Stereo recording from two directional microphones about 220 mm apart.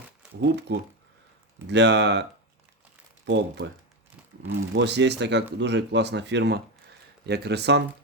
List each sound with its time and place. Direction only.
0.4 s speech: 50° right (ahead or behind)
3.2 s speech: 50° right (ahead or behind)